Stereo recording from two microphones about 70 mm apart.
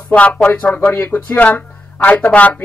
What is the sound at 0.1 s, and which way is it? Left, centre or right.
Speech, centre.